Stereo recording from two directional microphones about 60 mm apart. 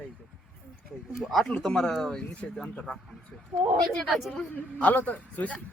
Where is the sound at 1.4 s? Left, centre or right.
Centre.